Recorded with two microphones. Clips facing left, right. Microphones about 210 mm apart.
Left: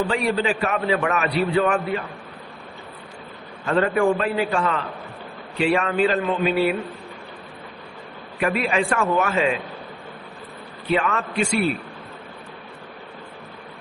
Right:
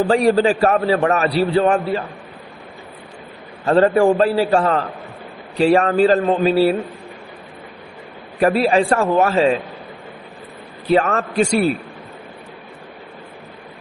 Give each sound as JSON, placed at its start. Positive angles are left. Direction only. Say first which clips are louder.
{"t": 0.0, "sound": "a man's voice", "louder": "right 8 dB", "side_deg": -40}
{"t": 3.7, "sound": "a man's voice", "louder": "right 6 dB", "side_deg": -35}
{"t": 8.4, "sound": "a man's voice", "louder": "right 7 dB", "side_deg": -35}
{"t": 10.8, "sound": "a man's voice", "louder": "right 6 dB", "side_deg": -40}